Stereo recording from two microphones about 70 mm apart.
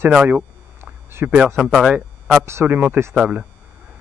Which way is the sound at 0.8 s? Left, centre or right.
Right.